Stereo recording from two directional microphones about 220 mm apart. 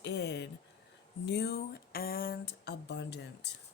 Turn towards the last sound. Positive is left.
turn(degrees=50)  # may be behind; listen again after turning